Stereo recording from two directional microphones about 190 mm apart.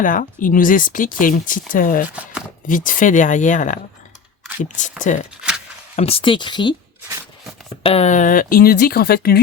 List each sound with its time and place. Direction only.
0.0 s speech: 45° left (ahead or behind)
4.8 s speech: 40° left (ahead or behind)
5.4 s a sound: 5° right (ahead or behind)
6.0 s speech: 30° left (ahead or behind)
7.9 s speech: 35° left (ahead or behind); by 9.4 s 55° left (ahead or behind)